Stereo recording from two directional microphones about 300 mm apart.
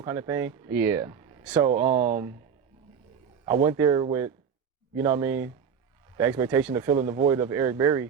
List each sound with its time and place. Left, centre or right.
0.0 s speech: centre
1.7 s speech: right
3.4 s speech: centre